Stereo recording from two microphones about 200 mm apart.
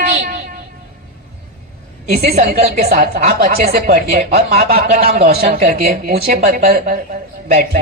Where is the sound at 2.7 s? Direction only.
50° right (ahead or behind).